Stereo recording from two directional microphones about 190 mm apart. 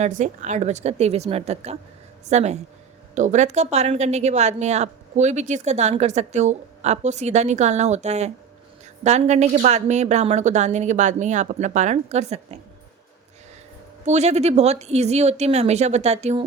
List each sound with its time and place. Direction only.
0.0 s speech: 40° right (ahead or behind)
14.0 s speech: 35° right (ahead or behind)